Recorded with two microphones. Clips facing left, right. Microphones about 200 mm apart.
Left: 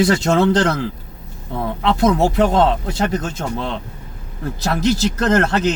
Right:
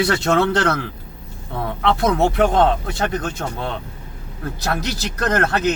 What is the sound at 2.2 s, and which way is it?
Speech, 30° left (ahead or behind).